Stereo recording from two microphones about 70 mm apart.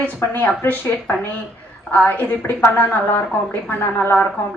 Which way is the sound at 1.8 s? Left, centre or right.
Left.